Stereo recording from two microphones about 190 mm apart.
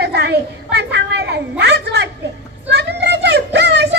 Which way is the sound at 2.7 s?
60° right (ahead or behind).